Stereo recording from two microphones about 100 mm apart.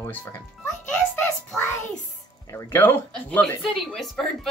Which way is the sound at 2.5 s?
25° left (ahead or behind).